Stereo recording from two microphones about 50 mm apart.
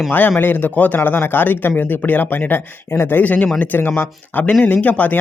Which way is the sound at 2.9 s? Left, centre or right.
Left.